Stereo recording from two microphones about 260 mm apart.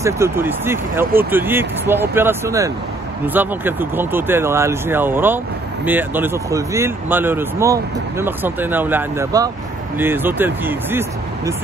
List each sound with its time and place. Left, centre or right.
0.0 s speech: centre